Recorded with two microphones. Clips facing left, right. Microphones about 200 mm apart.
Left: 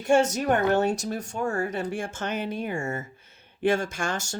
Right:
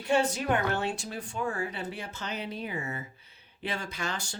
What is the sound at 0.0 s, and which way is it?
Speech, 45° left (ahead or behind).